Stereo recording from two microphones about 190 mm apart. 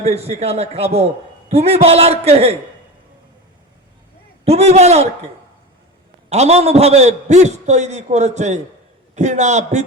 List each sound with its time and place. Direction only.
0.0 s a man's voice: 35° right (ahead or behind)
4.4 s a man's voice: 35° right (ahead or behind)
6.3 s a man's voice: 35° right (ahead or behind)